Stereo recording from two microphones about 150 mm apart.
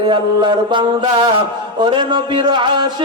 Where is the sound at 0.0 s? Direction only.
35° right (ahead or behind).